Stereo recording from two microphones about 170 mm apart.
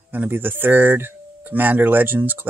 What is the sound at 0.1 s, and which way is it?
Speech, 10° right (ahead or behind).